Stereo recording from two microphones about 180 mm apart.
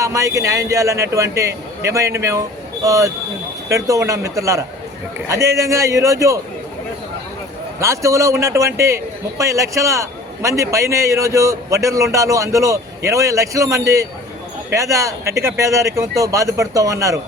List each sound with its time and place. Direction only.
0.0 s a man's voice: 15° right (ahead or behind)
7.8 s a man's voice: 15° right (ahead or behind)